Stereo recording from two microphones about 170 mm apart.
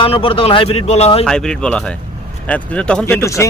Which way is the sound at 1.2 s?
5° left (ahead or behind).